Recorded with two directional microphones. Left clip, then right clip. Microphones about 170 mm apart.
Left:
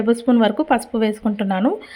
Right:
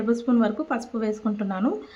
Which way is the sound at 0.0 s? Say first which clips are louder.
Left 7 dB; 25° left (ahead or behind).